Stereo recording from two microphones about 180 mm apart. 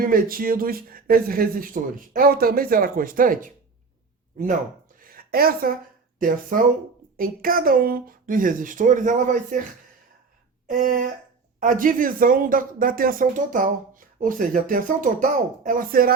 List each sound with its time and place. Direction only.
0.0 s speech: 50° right (ahead or behind)
4.9 s a sound: 55° right (ahead or behind)
6.1 s speech: 50° right (ahead or behind)
10.7 s speech: 50° right (ahead or behind)